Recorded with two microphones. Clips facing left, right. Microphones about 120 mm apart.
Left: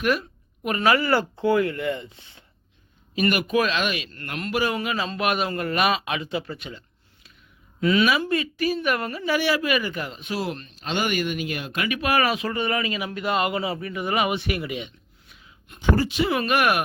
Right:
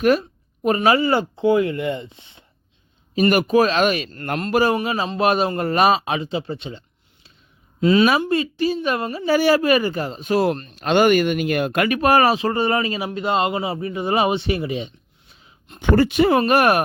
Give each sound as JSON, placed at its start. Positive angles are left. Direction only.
{"t": 0.0, "sound": "a sound", "side_deg": -35}
{"t": 0.8, "sound": "speech", "side_deg": -25}
{"t": 3.2, "sound": "speech", "side_deg": -35}
{"t": 15.8, "sound": "speech", "side_deg": -60}
{"t": 16.3, "sound": "speech", "side_deg": -35}